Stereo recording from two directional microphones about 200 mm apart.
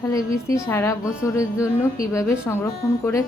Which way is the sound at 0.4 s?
15° left (ahead or behind).